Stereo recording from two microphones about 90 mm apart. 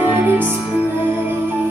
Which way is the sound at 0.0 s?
20° right (ahead or behind).